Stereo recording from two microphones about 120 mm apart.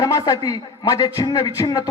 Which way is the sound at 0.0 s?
25° left (ahead or behind).